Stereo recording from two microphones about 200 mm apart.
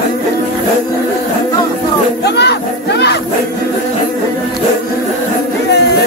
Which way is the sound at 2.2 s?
60° left (ahead or behind).